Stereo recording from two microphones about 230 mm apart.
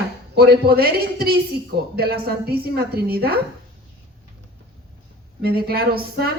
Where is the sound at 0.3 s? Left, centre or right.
Right.